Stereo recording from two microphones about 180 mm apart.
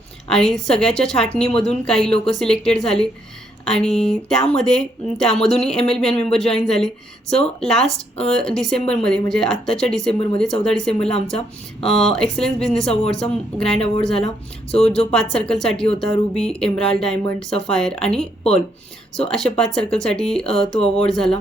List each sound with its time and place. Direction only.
0.3 s speech: 5° left (ahead or behind)
8.8 s a woman's voice: 35° left (ahead or behind)
9.0 s speech: 5° left (ahead or behind)
19.5 s speech: 5° left (ahead or behind)